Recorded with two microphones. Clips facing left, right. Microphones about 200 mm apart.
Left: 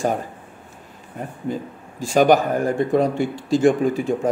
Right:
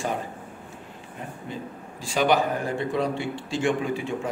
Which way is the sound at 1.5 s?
45° left (ahead or behind).